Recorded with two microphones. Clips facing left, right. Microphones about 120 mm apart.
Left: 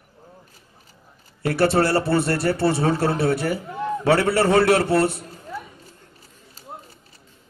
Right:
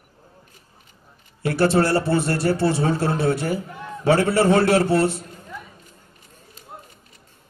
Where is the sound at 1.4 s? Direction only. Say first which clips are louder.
Even; 55° left (ahead or behind).